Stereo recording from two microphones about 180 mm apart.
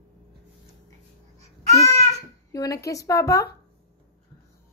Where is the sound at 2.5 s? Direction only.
20° left (ahead or behind).